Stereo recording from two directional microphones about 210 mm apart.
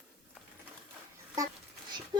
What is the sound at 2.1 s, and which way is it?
Speech, 20° right (ahead or behind).